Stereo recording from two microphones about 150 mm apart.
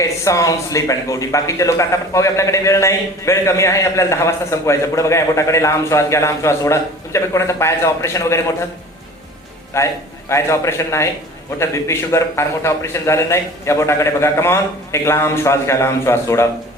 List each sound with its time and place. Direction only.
0.0 s speech: 20° left (ahead or behind)
9.7 s a man's voice: 20° left (ahead or behind)